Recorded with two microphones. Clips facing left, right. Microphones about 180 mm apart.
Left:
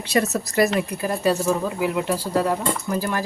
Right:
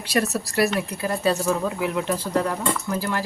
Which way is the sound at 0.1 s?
20° left (ahead or behind).